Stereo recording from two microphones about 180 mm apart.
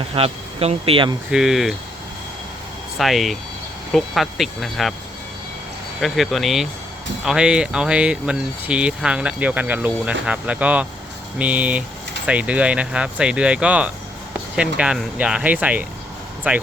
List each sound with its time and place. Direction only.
0.1 s speech: 35° right (ahead or behind)
1.3 s speech: 5° right (ahead or behind)
3.0 s speech: centre (ahead or behind)
6.0 s speech: centre (ahead or behind)